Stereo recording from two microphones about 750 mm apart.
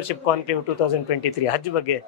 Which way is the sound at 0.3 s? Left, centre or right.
Left.